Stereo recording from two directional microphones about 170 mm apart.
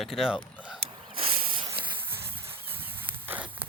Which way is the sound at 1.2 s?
35° right (ahead or behind).